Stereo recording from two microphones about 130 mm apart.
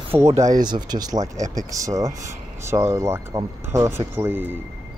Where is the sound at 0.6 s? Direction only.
35° right (ahead or behind); by 4.6 s 15° right (ahead or behind).